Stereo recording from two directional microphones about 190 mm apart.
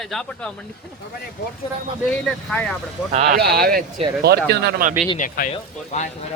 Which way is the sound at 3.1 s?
40° right (ahead or behind).